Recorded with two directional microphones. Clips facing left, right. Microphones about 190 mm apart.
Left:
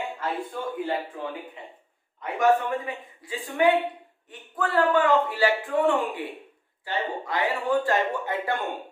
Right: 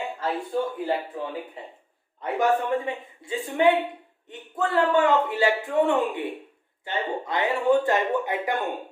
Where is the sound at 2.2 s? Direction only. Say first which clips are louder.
Left 1 dB; 30° right (ahead or behind).